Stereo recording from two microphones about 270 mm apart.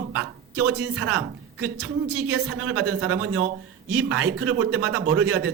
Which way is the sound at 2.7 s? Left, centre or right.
Right.